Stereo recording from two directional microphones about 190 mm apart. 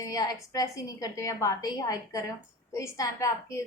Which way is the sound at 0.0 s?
20° left (ahead or behind).